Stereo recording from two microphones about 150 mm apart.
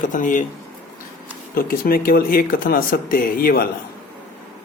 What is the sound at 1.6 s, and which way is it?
Speech, 75° left (ahead or behind).